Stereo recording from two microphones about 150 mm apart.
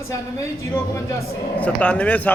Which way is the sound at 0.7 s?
15° left (ahead or behind).